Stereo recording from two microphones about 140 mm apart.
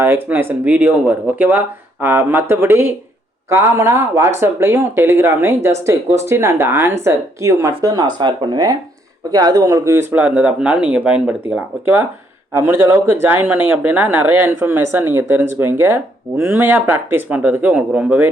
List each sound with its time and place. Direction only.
0.0 s speech: 15° right (ahead or behind)